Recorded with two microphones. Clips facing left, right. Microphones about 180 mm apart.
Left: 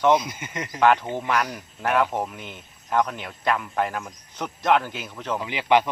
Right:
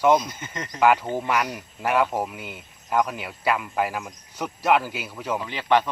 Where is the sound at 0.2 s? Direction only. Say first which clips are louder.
Left 1 dB; 10° left (ahead or behind).